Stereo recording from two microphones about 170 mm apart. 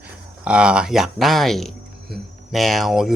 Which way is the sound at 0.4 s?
5° right (ahead or behind).